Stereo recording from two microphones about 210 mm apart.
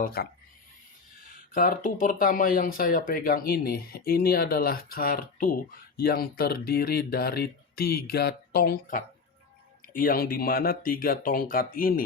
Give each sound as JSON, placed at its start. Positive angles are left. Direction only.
{"t": 0.0, "sound": "speech", "side_deg": 50}
{"t": 1.5, "sound": "speech", "side_deg": 40}